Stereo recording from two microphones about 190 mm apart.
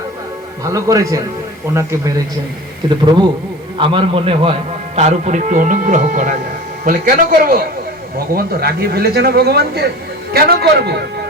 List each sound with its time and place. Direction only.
0.6 s a man's voice: 15° right (ahead or behind); by 11.0 s 60° right (ahead or behind)